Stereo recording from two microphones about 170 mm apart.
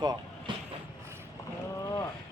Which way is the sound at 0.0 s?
25° right (ahead or behind).